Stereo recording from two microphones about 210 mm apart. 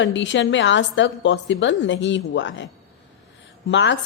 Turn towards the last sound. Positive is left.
turn(degrees=60)  # may be behind; listen again after turning